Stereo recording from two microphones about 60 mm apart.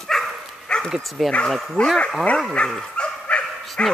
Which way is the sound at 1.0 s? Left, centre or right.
Centre.